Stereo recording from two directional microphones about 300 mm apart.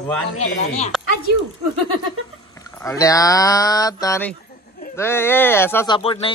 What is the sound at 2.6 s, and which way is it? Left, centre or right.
Speech, centre.